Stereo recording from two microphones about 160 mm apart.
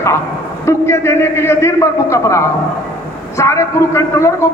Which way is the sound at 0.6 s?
15° left (ahead or behind).